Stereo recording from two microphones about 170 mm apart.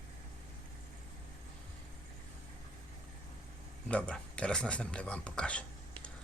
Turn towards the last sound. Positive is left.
turn(degrees=5)  # may be behind; listen again after turning